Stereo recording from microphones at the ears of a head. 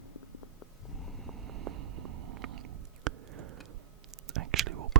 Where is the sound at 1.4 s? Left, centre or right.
Right.